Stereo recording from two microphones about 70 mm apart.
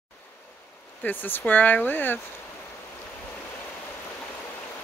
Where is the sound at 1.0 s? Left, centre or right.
Left.